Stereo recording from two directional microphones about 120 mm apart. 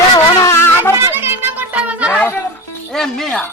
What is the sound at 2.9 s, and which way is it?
Speech, 5° left (ahead or behind).